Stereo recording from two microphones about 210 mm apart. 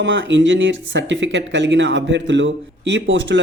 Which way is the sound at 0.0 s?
60° right (ahead or behind).